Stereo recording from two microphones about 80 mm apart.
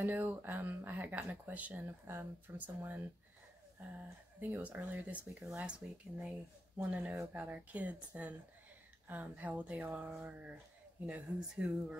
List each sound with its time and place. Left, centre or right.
0.0 s speech: right
5.4 s speech: centre